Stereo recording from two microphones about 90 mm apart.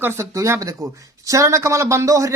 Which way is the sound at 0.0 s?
30° right (ahead or behind).